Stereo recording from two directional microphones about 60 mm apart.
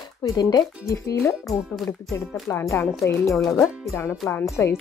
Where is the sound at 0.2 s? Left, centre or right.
Left.